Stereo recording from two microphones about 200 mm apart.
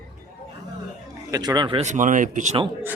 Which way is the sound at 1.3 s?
20° right (ahead or behind).